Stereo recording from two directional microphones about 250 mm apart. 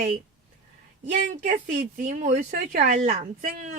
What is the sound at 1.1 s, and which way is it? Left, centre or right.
Speech, right.